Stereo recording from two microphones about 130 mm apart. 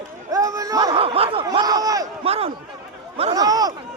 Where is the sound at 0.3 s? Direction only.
25° right (ahead or behind).